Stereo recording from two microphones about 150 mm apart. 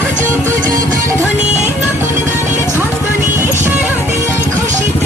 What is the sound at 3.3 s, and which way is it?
Music, 15° right (ahead or behind).